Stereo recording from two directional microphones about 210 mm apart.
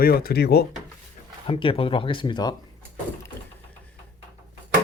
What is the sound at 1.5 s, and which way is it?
Speech, 25° left (ahead or behind).